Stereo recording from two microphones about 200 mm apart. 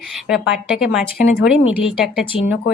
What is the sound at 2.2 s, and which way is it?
Speech, 25° left (ahead or behind).